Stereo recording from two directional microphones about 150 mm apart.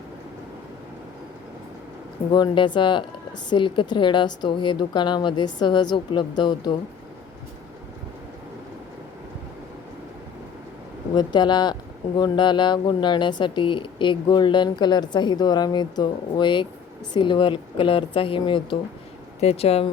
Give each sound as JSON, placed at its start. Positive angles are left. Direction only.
{"t": 2.3, "sound": "a woman's voice", "side_deg": 30}
{"t": 11.1, "sound": "a woman's voice", "side_deg": 30}
{"t": 19.4, "sound": "speech", "side_deg": 45}